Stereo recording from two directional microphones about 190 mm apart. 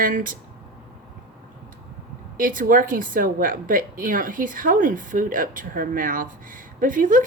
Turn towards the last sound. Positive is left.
turn(degrees=-45)  # may be behind; listen again after turning